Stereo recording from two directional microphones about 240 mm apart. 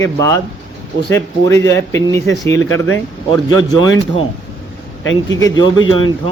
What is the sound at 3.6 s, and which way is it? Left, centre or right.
Speech, centre.